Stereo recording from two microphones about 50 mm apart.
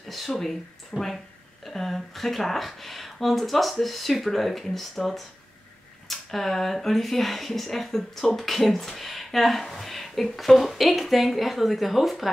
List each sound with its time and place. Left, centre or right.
0.1 s speech: centre